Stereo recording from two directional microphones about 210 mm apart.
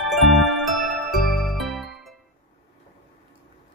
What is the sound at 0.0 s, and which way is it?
Jingle, centre (ahead or behind).